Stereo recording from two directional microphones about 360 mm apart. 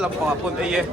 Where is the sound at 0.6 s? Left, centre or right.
Centre.